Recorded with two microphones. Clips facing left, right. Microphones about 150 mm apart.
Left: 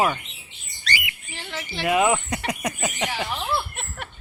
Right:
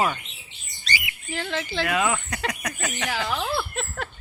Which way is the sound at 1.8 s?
20° left (ahead or behind).